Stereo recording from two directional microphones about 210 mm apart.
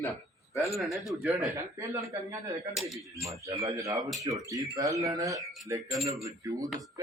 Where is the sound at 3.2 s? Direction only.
15° right (ahead or behind).